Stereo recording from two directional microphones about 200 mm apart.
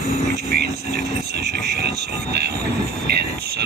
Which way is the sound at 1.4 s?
55° right (ahead or behind).